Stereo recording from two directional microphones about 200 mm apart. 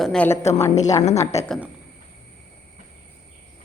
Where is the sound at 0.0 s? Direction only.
Centre (ahead or behind).